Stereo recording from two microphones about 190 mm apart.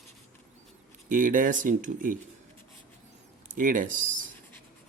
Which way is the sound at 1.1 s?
45° right (ahead or behind).